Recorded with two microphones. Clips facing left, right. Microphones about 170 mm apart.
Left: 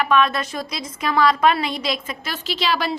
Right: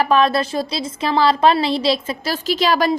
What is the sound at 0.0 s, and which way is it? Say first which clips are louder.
A woman's voice: right 3 dB; 35° right (ahead or behind).